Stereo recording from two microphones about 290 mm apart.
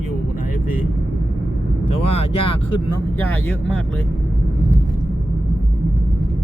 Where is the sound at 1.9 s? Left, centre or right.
Left.